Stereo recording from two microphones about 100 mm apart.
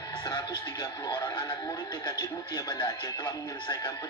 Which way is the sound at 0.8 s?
45° left (ahead or behind).